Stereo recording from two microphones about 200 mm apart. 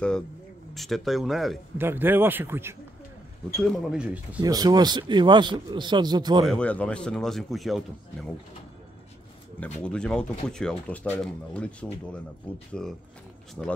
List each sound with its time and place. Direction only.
0.7 s speech: centre (ahead or behind)
3.6 s speech: centre (ahead or behind)
4.4 s a man's voice: 20° right (ahead or behind)
6.4 s speech: 5° left (ahead or behind)
9.6 s speech: 5° left (ahead or behind)